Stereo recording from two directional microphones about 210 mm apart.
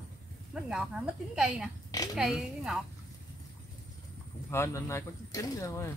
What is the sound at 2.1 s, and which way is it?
Speech, centre (ahead or behind).